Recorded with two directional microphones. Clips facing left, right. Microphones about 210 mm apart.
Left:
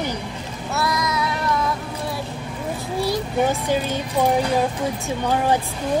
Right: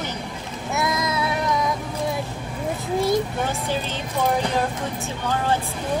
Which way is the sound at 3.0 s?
20° right (ahead or behind).